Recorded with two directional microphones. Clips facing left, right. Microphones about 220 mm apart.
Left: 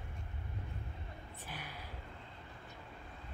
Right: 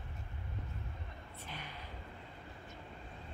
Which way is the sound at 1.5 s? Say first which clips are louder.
Even; 10° left (ahead or behind).